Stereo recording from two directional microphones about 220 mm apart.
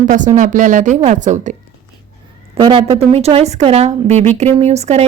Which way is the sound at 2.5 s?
20° right (ahead or behind).